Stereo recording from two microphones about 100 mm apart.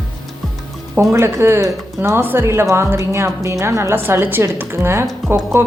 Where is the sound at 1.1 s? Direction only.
25° right (ahead or behind).